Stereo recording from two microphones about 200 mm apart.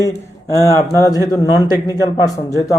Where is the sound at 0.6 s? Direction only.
15° left (ahead or behind).